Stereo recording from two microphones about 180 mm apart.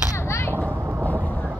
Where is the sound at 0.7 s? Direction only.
10° right (ahead or behind).